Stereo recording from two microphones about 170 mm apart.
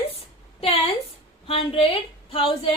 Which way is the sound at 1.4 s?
35° left (ahead or behind).